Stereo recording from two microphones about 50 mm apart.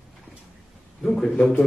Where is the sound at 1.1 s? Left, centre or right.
Centre.